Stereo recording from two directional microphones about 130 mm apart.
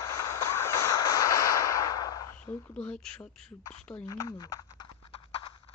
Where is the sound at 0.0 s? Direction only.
20° left (ahead or behind).